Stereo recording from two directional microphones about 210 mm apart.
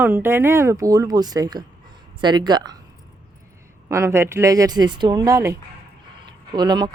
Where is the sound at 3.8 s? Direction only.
15° right (ahead or behind).